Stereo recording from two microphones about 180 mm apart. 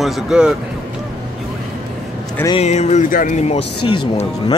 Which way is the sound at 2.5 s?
40° left (ahead or behind).